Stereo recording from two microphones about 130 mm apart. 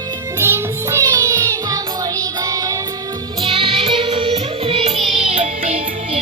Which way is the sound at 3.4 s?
40° right (ahead or behind).